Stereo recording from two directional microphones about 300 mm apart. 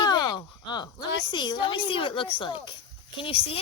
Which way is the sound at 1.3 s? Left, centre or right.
Centre.